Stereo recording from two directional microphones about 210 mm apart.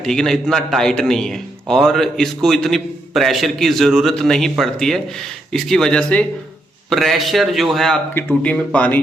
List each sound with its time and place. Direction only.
0.0 s a man's voice: centre (ahead or behind)